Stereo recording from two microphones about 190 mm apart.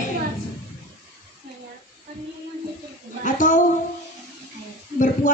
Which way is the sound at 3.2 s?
40° left (ahead or behind).